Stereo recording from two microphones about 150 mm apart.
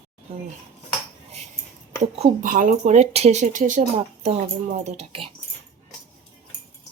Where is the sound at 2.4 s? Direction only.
65° right (ahead or behind).